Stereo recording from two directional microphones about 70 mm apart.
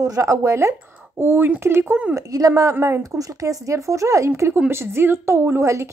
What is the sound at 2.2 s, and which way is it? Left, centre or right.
A woman's voice, right.